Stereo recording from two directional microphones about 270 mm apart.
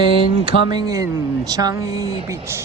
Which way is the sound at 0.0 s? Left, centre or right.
Centre.